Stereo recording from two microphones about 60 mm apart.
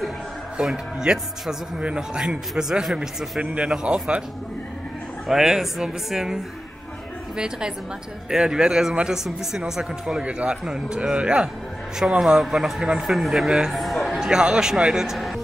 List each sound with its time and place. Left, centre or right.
0.7 s a man's voice: centre
3.3 s speech: centre
5.3 s a man's voice: centre
13.7 s a sound: centre
14.2 s speech: centre